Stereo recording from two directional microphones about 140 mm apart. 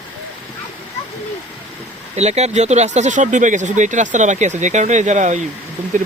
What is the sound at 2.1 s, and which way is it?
Speech, 50° right (ahead or behind).